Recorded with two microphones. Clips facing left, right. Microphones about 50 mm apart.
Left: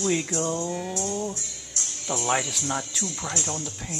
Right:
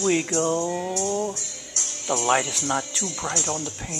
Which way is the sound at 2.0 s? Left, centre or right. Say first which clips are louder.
Right 4 dB; right.